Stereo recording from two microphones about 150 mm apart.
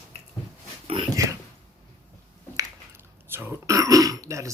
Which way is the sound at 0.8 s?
35° right (ahead or behind).